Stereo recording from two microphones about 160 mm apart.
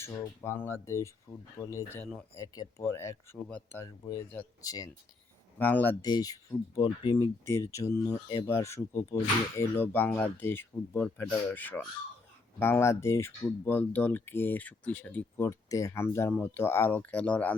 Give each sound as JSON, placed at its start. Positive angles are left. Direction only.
{"t": 0.0, "sound": "speech", "side_deg": 15}
{"t": 4.0, "sound": "speech", "side_deg": 20}
{"t": 5.5, "sound": "speech", "side_deg": 10}
{"t": 6.0, "sound": "speech", "side_deg": 25}